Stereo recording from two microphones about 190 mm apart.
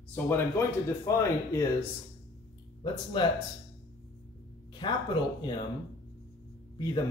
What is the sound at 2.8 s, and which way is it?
Speech, 25° left (ahead or behind).